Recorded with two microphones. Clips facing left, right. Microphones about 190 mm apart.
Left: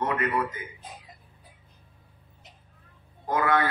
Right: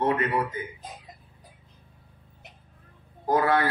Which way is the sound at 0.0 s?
30° right (ahead or behind).